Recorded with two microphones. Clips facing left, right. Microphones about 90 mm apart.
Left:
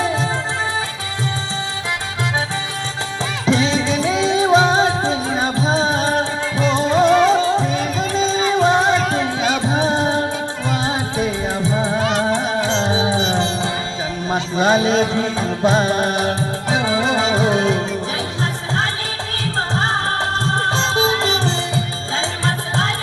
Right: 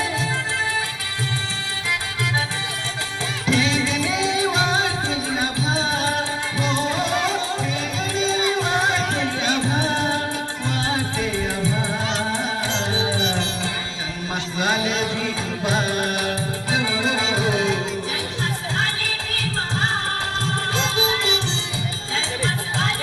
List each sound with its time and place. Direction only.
0.0 s music: 30° left (ahead or behind)
3.4 s music: 25° left (ahead or behind)
9.0 s music: 40° left (ahead or behind)
9.4 s music: 20° left (ahead or behind)
11.9 s music: 55° left (ahead or behind)
12.4 s music: 25° left (ahead or behind)
19.5 s music: 35° left (ahead or behind)